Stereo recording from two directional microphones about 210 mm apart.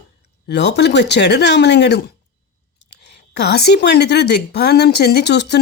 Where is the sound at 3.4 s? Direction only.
50° left (ahead or behind).